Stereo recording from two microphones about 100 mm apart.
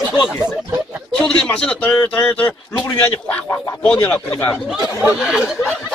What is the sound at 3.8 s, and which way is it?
Speech, 10° left (ahead or behind).